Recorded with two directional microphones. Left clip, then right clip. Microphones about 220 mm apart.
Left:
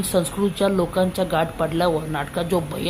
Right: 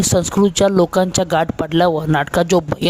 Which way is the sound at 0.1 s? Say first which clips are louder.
Right 4 dB; 45° right (ahead or behind).